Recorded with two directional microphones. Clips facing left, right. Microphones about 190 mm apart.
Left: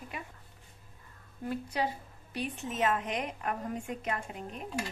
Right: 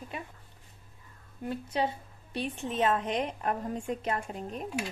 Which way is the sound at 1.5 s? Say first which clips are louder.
Right 2 dB; 25° right (ahead or behind).